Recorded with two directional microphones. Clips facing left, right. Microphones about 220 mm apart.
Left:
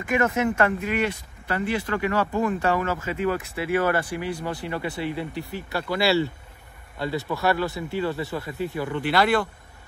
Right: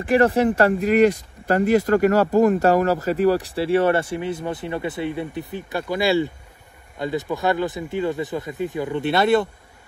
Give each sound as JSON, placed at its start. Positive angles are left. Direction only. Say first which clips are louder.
{"t": 0.0, "sound": "speech", "louder": "right 6 dB", "side_deg": -35}